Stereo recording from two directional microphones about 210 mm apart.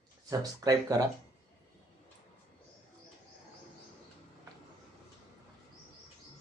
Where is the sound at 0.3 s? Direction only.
15° right (ahead or behind).